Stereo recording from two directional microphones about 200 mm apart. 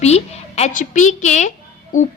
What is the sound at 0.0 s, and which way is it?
A woman's voice, 35° left (ahead or behind).